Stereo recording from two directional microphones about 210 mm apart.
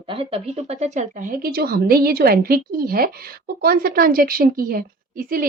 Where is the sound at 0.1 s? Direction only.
25° right (ahead or behind).